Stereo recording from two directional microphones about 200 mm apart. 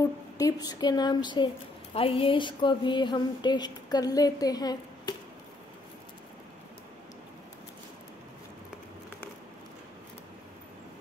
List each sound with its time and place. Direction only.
0.4 s speech: 20° left (ahead or behind)